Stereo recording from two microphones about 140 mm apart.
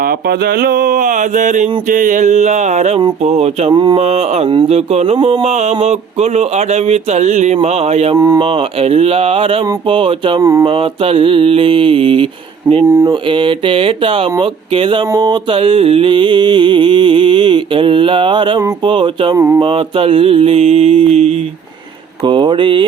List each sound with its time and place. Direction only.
0.0 s mantra: 90° right; by 3.0 s 50° right (ahead or behind)
3.0 s speech: 45° right (ahead or behind)
3.7 s mantra: 35° right (ahead or behind)
4.0 s speech: 50° right (ahead or behind)
8.1 s speech: 25° right (ahead or behind)
8.4 s mantra: 40° right (ahead or behind)
10.4 s speech: 20° right (ahead or behind)
10.7 s mantra: 40° right (ahead or behind)
12.9 s speech: 20° right (ahead or behind)
13.2 s mantra: 35° right (ahead or behind)
19.4 s speech: 20° right (ahead or behind)
19.6 s speech: 40° right (ahead or behind)
22.2 s mantra: 35° right (ahead or behind)